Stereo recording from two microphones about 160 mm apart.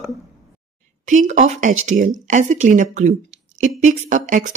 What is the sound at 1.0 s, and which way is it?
Speech, 50° right (ahead or behind).